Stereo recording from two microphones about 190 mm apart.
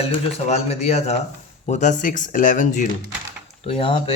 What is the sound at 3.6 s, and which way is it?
Speech, 30° left (ahead or behind).